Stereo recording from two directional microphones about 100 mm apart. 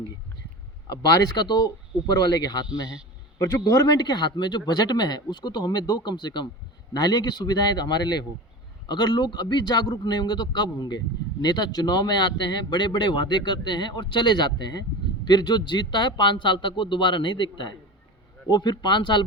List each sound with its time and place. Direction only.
0.9 s a man's voice: 40° left (ahead or behind)
3.3 s a man's voice: 30° left (ahead or behind); by 19.2 s 50° left (ahead or behind)